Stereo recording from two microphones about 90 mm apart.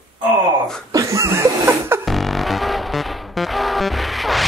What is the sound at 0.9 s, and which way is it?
Chuckle, 35° right (ahead or behind).